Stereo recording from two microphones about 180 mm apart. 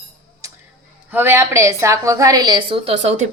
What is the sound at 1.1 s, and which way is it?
A woman's voice, 15° right (ahead or behind).